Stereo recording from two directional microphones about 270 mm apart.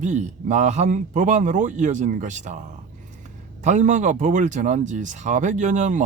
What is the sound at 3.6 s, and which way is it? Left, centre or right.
Speech, right.